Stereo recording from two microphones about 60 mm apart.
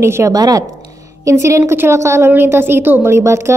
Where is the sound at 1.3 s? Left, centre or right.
Right.